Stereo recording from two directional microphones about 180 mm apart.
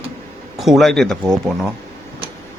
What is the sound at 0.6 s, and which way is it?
Speech, centre (ahead or behind).